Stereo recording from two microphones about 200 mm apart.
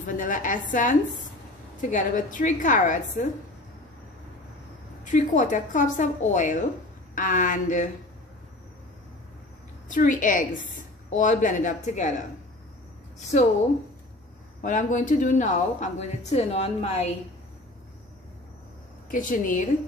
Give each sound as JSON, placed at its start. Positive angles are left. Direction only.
{"t": 0.0, "sound": "speech", "side_deg": 40}
{"t": 5.0, "sound": "speech", "side_deg": 40}
{"t": 9.8, "sound": "speech", "side_deg": 40}
{"t": 13.3, "sound": "speech", "side_deg": 35}
{"t": 14.6, "sound": "speech", "side_deg": 40}
{"t": 19.0, "sound": "speech", "side_deg": 40}